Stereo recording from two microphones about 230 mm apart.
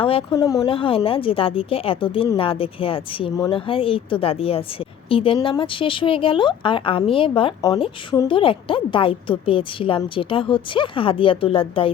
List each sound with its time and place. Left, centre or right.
0.0 s a woman's voice: left